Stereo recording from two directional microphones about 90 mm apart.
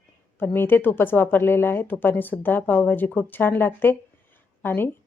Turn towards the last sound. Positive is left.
turn(degrees=25)  # may be behind; listen again after turning